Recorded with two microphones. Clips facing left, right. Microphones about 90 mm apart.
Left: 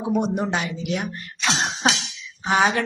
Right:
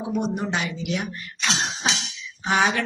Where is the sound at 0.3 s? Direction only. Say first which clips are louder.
Left 2 dB; 35° left (ahead or behind).